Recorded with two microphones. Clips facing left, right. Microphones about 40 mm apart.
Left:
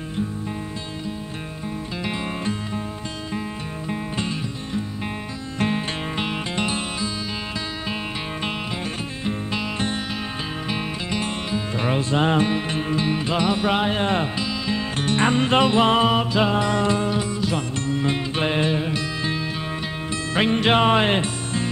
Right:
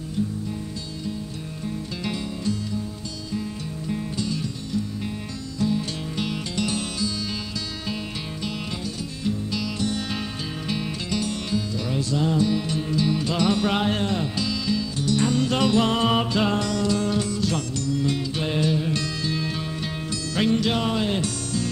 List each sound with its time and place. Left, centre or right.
2.0 s music: left
3.9 s music: left
5.6 s music: left
6.1 s music: left
14.0 s speech: left
14.4 s music: left
14.8 s music: left
16.1 s music: centre
16.3 s music: centre
17.8 s music: left
20.1 s music: left